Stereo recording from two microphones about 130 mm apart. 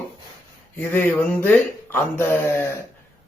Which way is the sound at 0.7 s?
15° left (ahead or behind).